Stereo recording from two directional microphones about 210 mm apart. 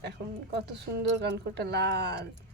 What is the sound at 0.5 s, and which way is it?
Speech, 55° right (ahead or behind).